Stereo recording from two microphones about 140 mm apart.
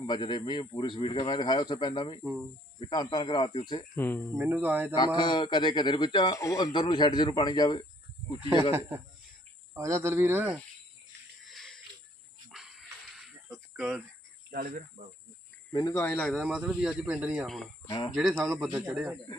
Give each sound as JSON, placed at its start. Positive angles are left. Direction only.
{"t": 0.1, "sound": "a man's voice", "side_deg": 35}
{"t": 3.9, "sound": "speech", "side_deg": 15}
{"t": 4.4, "sound": "speech", "side_deg": -10}
{"t": 4.9, "sound": "a man's voice", "side_deg": 30}
{"t": 6.7, "sound": "a man's voice", "side_deg": 35}
{"t": 9.7, "sound": "speech", "side_deg": -20}
{"t": 11.5, "sound": "a sound", "side_deg": 0}
{"t": 14.6, "sound": "speech", "side_deg": -90}
{"t": 15.7, "sound": "speech", "side_deg": 25}
{"t": 16.3, "sound": "speech", "side_deg": -5}
{"t": 17.8, "sound": "speech", "side_deg": 25}
{"t": 18.1, "sound": "speech", "side_deg": 0}